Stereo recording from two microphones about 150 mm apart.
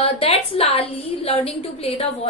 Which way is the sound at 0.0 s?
40° left (ahead or behind).